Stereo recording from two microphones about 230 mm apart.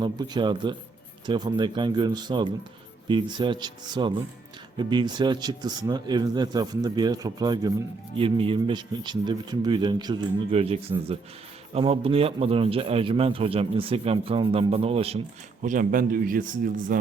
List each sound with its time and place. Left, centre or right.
0.0 s a man's voice: centre; by 17.1 s right